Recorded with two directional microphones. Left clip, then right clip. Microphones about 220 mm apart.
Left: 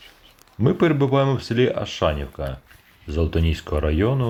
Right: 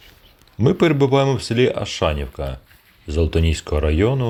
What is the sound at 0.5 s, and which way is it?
Speech, 25° right (ahead or behind).